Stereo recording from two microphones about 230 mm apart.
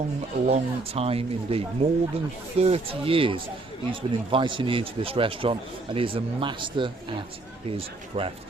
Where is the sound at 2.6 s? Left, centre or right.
Right.